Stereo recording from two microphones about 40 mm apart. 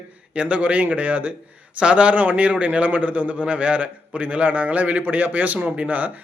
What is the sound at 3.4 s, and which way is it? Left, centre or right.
A man's voice, right.